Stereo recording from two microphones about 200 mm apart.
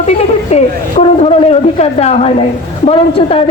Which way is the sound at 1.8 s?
30° left (ahead or behind).